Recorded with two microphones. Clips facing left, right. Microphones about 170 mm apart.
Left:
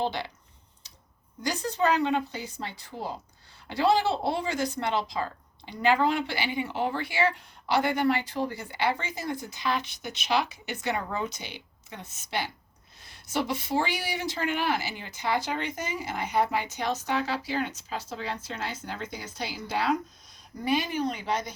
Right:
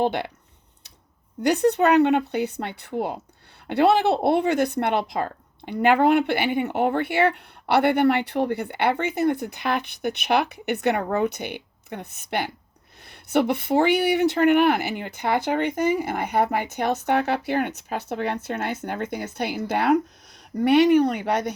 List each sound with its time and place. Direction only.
0.0 s speech: 55° right (ahead or behind)
1.4 s speech: 65° right (ahead or behind)
20.7 s speech: 70° right (ahead or behind)